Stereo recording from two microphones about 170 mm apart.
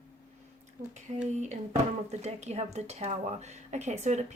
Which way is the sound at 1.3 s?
45° right (ahead or behind).